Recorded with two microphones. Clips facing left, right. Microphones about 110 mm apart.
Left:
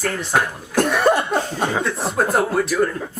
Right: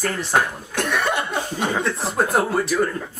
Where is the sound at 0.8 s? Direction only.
40° left (ahead or behind).